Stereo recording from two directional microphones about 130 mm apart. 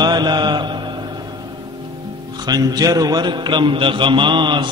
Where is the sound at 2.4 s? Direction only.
30° right (ahead or behind).